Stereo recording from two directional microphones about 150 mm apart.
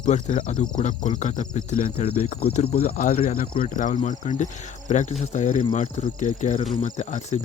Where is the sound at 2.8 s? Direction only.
70° left (ahead or behind).